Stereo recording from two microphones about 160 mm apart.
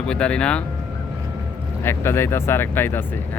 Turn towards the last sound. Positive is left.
turn(degrees=15)  # may be behind; listen again after turning